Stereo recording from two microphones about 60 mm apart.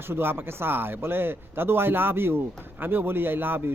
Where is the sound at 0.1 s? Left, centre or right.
Right.